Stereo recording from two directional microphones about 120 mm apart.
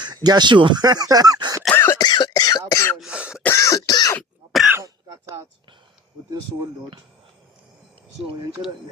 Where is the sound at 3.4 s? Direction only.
25° left (ahead or behind).